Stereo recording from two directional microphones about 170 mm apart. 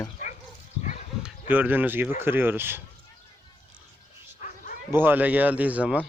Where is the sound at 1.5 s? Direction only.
10° right (ahead or behind).